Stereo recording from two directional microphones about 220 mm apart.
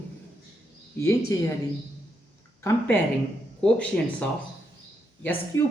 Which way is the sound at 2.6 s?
10° left (ahead or behind).